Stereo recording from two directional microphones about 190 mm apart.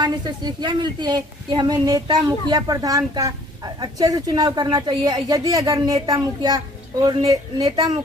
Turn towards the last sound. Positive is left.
turn(degrees=-20)  # may be behind; listen again after turning